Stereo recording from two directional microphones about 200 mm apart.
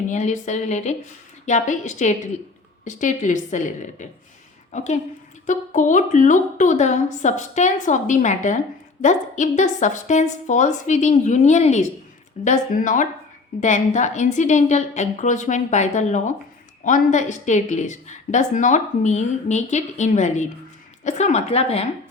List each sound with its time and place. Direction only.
0.1 s a woman's voice: 35° left (ahead or behind)